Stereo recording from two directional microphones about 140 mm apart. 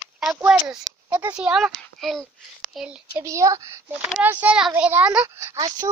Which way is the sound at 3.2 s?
20° right (ahead or behind).